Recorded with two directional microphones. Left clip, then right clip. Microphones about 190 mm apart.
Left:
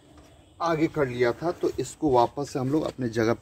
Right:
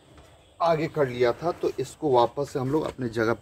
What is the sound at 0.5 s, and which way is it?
Speech, 25° left (ahead or behind).